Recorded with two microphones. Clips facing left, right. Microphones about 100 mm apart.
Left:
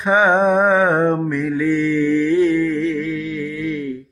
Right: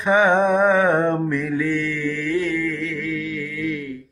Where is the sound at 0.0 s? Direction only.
20° left (ahead or behind).